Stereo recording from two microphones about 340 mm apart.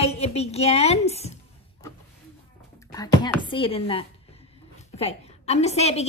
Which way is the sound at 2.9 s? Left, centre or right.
Centre.